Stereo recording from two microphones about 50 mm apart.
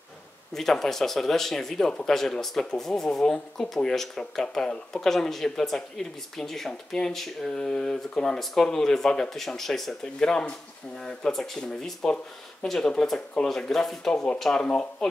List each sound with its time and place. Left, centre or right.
0.5 s speech: centre
14.1 s speech: centre